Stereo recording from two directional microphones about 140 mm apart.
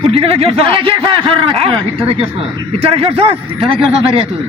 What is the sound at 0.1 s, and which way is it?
Speech, 45° right (ahead or behind).